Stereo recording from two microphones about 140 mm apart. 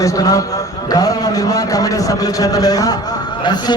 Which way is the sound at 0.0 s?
25° left (ahead or behind).